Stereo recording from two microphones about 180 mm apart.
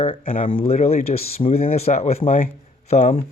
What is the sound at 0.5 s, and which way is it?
Speech, 35° left (ahead or behind).